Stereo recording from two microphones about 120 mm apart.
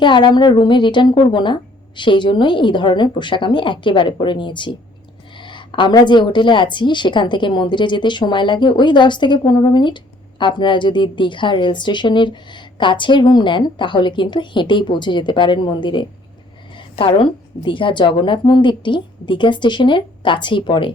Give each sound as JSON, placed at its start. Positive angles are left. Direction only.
{"t": 0.0, "sound": "a woman's voice", "side_deg": 40}